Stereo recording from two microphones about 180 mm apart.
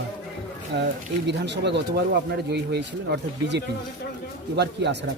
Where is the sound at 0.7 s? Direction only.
70° right (ahead or behind).